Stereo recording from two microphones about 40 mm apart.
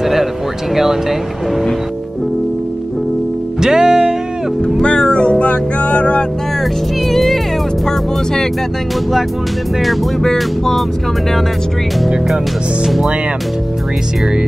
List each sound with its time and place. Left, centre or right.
0.0 s a sound: centre
3.6 s music: centre
4.8 s music: left
7.1 s music: centre
10.3 s speech: centre
12.8 s speech: centre